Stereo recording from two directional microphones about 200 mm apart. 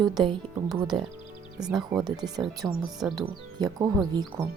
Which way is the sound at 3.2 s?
20° right (ahead or behind).